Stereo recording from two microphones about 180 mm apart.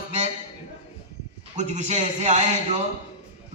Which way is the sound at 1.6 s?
40° right (ahead or behind).